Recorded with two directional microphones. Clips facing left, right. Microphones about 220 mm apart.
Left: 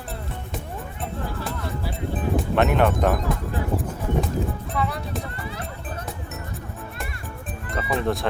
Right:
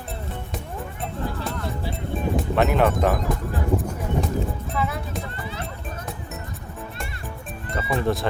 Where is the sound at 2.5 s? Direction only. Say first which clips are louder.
Even; centre (ahead or behind).